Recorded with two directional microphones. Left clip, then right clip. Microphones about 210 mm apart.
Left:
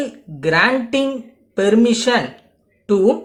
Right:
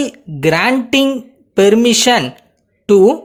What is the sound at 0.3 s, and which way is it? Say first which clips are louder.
Speech: right 2 dB; 45° right (ahead or behind).